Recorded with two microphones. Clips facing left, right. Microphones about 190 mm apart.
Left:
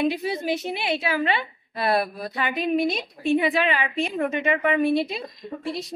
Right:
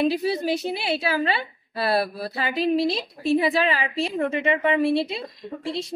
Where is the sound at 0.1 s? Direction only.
35° right (ahead or behind).